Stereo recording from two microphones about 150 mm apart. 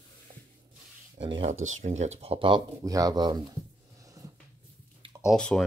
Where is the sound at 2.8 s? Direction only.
25° right (ahead or behind).